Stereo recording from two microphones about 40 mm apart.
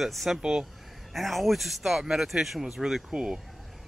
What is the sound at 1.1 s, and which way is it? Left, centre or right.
Speech, centre.